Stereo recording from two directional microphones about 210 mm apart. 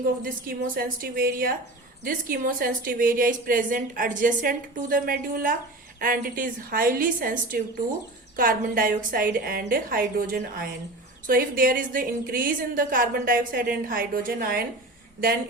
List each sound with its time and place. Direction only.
0.0 s a woman's voice: 45° right (ahead or behind)